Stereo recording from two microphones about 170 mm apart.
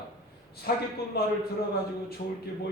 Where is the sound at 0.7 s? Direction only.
60° left (ahead or behind).